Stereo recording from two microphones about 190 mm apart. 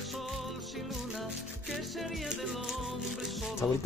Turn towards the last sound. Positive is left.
turn(degrees=0)  # may be behind; listen again after turning